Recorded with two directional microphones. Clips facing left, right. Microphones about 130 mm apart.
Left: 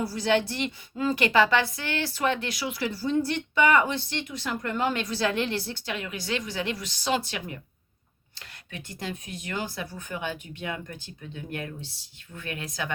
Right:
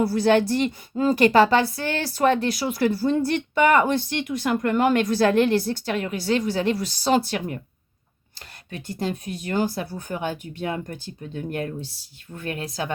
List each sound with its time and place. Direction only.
0.0 s speech: 55° right (ahead or behind); by 12.9 s 35° right (ahead or behind)